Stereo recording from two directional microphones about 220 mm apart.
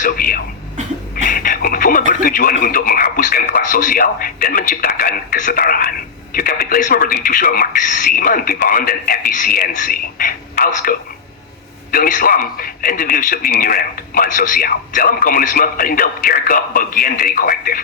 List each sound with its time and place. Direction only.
0.0 s a man's voice: 40° left (ahead or behind)